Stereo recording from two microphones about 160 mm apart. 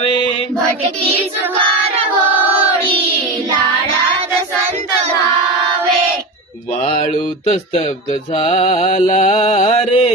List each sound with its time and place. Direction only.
8.4 s music: 40° left (ahead or behind)